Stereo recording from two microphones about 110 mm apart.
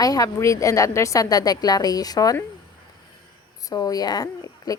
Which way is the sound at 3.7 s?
35° left (ahead or behind).